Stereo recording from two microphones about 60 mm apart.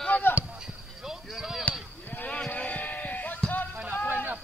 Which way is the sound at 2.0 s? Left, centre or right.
Left.